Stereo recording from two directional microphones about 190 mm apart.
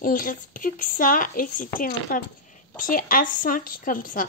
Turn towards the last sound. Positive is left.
turn(degrees=45)  # may be behind; listen again after turning